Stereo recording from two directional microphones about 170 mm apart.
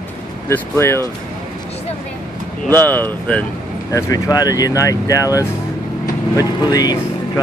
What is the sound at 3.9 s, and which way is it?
Speech, 20° left (ahead or behind).